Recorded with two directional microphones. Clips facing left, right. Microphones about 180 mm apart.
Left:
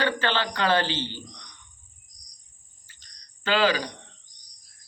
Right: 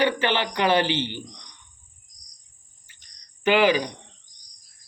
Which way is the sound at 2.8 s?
15° right (ahead or behind).